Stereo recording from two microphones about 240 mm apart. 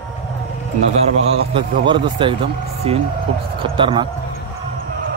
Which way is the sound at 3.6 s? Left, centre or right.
Right.